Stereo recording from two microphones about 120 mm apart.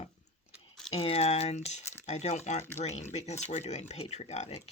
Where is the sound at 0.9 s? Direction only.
55° left (ahead or behind).